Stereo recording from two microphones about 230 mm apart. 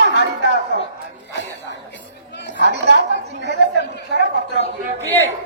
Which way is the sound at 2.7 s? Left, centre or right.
Right.